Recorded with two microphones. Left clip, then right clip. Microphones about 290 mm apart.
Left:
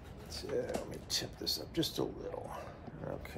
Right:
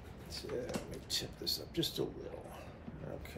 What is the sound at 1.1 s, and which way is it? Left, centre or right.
Speech, left.